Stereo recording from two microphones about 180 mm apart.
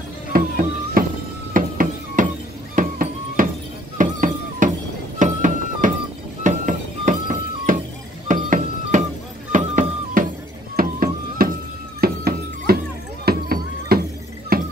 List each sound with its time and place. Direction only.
0.3 s music: 50° right (ahead or behind)
1.5 s a sound: 50° right (ahead or behind)
2.7 s music: 50° right (ahead or behind)